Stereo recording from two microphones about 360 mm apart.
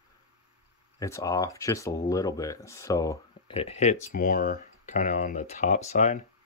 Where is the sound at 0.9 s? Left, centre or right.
Centre.